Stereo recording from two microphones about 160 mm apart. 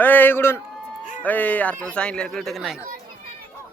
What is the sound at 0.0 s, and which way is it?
A man's voice, 10° left (ahead or behind).